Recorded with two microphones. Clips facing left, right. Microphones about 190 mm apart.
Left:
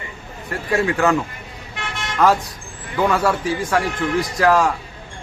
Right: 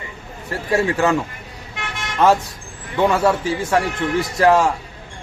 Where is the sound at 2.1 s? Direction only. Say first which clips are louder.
Right 1 dB; 25° right (ahead or behind).